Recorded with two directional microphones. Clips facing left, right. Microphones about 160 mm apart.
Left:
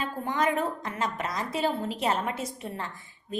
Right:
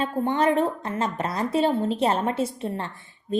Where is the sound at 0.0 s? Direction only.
30° right (ahead or behind).